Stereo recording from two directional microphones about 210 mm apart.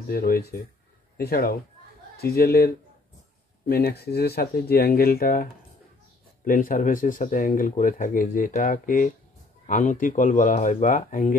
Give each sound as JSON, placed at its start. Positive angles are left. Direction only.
{"t": 0.1, "sound": "speech", "side_deg": 45}